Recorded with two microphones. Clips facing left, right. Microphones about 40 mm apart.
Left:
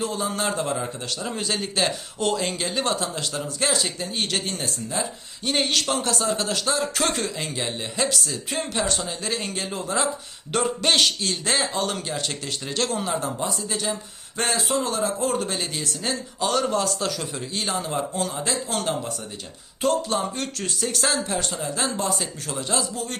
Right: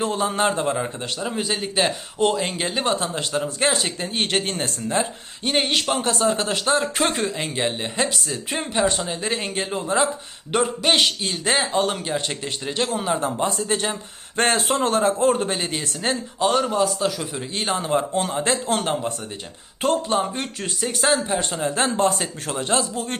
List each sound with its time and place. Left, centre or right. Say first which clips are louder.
0.0 s a man's voice: right 5 dB; right
1.3 s a man's voice: right 1 dB; centre; by 5.5 s right
5.5 s a man's voice: right 2 dB; right
13.1 s speech: right 4 dB; right
16.6 s a man's voice: right 3 dB; centre
17.5 s speech: right 5 dB; right
20.1 s a man's voice: right 3 dB; right
21.6 s speech: right 6 dB; right